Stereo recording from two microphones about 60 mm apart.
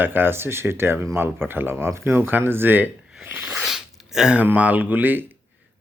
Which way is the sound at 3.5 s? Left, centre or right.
Centre.